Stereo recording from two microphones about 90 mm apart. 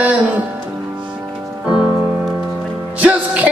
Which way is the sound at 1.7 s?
10° right (ahead or behind).